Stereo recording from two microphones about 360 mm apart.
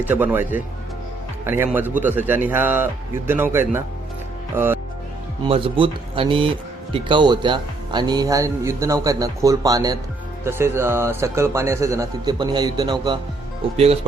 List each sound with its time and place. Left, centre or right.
0.0 s a man's voice: centre